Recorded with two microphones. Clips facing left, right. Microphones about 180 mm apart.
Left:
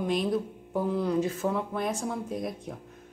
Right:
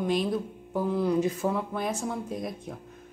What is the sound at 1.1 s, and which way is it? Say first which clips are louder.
Speech: right 1 dB; 15° right (ahead or behind).